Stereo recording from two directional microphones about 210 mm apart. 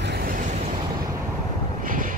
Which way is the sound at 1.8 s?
40° right (ahead or behind).